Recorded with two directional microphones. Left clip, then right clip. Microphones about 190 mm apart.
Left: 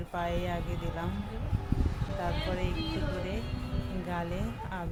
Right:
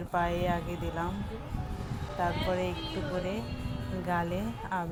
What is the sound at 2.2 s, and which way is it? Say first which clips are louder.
Speech: right 4 dB; 15° right (ahead or behind).